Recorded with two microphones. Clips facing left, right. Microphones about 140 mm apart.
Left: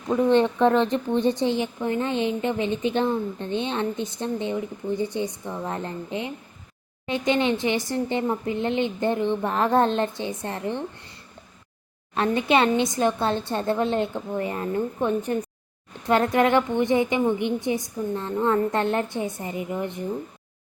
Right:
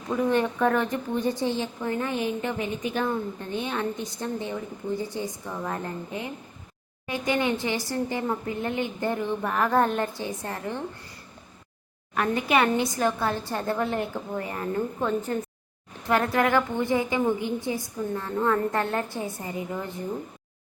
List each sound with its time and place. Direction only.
0.1 s a woman's voice: 25° left (ahead or behind)
12.1 s a woman's voice: 25° left (ahead or behind)